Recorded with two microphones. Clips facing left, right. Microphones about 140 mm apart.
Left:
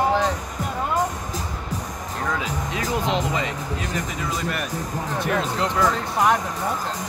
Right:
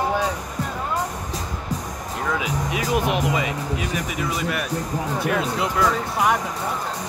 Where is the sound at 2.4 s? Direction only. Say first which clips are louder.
Right 2 dB; 10° right (ahead or behind).